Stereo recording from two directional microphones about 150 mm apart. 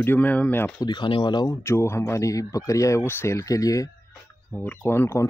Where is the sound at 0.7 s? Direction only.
30° left (ahead or behind).